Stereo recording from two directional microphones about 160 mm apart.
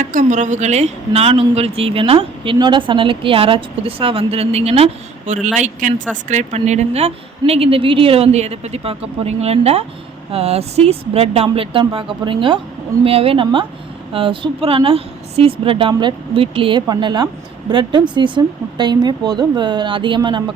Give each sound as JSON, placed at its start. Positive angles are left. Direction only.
{"t": 0.0, "sound": "a woman's voice", "side_deg": -55}